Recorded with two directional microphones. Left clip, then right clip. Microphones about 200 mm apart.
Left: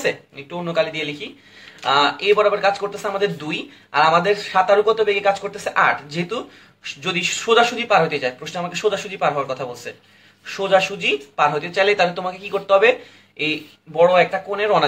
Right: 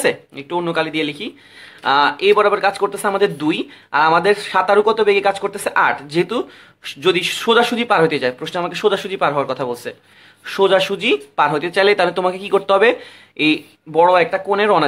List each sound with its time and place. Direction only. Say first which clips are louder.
0.0 s speech: right 4 dB; 45° right (ahead or behind)